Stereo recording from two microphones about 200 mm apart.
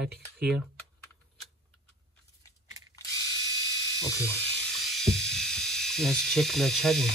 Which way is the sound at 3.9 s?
15° left (ahead or behind).